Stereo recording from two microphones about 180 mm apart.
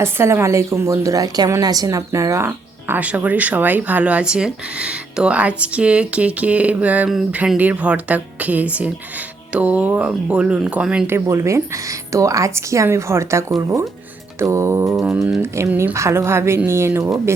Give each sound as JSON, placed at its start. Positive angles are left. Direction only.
{"t": 0.0, "sound": "a woman's voice", "side_deg": -15}